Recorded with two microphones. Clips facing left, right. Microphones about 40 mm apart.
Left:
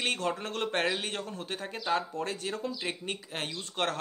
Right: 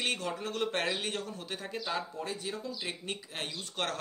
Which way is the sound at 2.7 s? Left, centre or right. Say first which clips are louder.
Left 3 dB; left.